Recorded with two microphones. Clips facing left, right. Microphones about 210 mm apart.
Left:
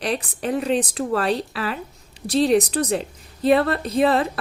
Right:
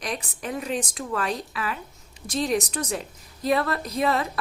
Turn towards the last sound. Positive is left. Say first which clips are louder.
# left 6 dB
turn(degrees=30)  # may be behind; listen again after turning